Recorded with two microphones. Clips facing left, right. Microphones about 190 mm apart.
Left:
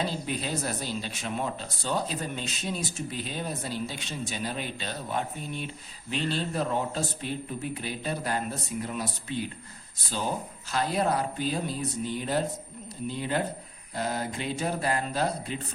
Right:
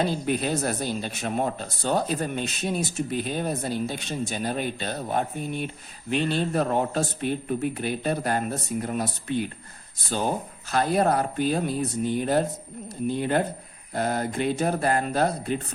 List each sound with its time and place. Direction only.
0.3 s speech: 55° right (ahead or behind)
10.7 s speech: 50° right (ahead or behind)